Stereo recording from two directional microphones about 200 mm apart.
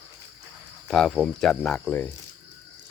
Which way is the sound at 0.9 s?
Centre (ahead or behind).